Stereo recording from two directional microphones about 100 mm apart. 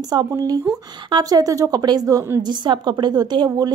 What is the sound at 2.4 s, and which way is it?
A woman's voice, 50° right (ahead or behind).